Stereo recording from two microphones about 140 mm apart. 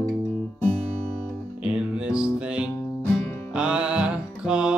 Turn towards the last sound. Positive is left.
turn(degrees=-5)  # may be behind; listen again after turning